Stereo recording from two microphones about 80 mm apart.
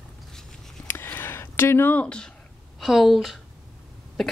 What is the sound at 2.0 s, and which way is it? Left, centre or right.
Speech, centre.